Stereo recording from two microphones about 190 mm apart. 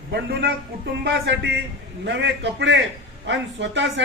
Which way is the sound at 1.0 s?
65° right (ahead or behind).